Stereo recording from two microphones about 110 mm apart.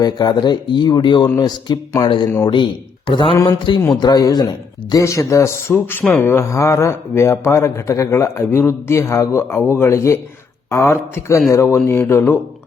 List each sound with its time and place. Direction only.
0.0 s speech: 40° left (ahead or behind)
4.0 s speech: 35° left (ahead or behind)